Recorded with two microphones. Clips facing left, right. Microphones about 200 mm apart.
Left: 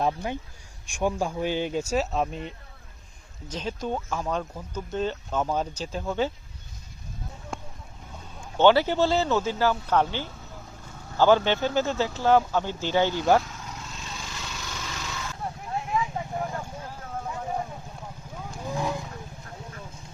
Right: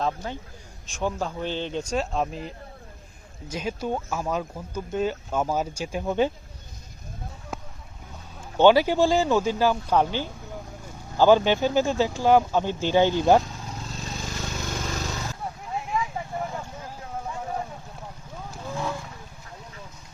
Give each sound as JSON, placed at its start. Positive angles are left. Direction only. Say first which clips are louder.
{"t": 0.0, "sound": "speech", "louder": "left 2 dB", "side_deg": 15}
{"t": 7.5, "sound": "a sound", "louder": "right 1 dB", "side_deg": -5}
{"t": 8.5, "sound": "speech", "louder": "right 2 dB", "side_deg": -15}
{"t": 13.5, "sound": "vehicle", "louder": "right 3 dB", "side_deg": -30}
{"t": 18.6, "sound": "wild animals", "louder": "left 1 dB", "side_deg": 15}